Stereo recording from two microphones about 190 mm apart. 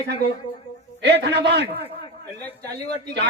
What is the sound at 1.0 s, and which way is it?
Speech, 65° right (ahead or behind).